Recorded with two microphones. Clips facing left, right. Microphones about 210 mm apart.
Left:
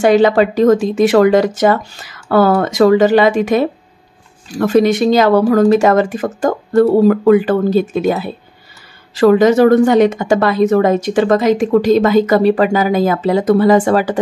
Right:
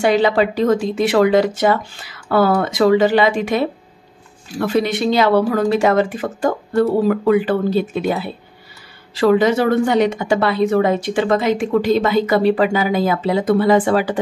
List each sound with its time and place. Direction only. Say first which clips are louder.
0.0 s speech: left 5 dB; 45° left (ahead or behind)